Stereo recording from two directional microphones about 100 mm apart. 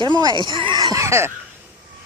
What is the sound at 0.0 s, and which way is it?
Speech, 45° right (ahead or behind).